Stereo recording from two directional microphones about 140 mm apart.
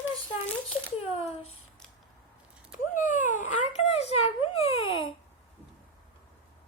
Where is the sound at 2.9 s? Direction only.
65° left (ahead or behind); by 5.0 s 40° left (ahead or behind).